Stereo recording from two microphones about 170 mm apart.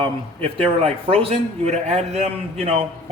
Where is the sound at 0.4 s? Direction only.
35° right (ahead or behind).